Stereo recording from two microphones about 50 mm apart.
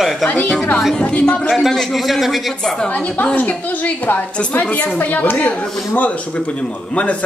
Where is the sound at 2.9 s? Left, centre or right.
Left.